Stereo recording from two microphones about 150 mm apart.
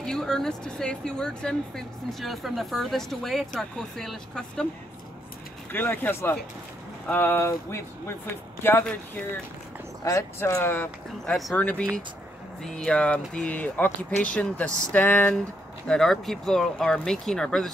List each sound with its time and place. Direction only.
0.0 s speech: 5° left (ahead or behind)
5.7 s speech: 15° left (ahead or behind)